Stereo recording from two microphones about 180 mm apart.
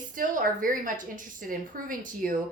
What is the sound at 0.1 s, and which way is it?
A woman's voice, 50° right (ahead or behind).